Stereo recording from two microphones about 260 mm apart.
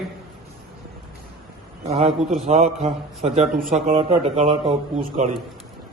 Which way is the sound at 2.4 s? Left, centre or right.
Right.